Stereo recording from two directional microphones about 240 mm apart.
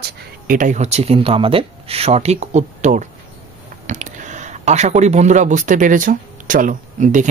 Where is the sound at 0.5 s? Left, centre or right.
Right.